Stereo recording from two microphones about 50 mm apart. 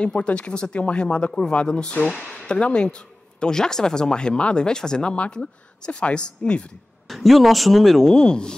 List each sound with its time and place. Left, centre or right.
0.0 s speech: left
7.1 s speech: centre